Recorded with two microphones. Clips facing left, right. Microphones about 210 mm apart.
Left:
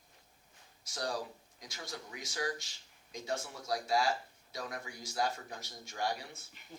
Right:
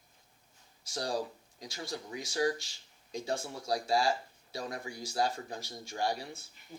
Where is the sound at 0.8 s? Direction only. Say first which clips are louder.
Right 4 dB; 30° right (ahead or behind).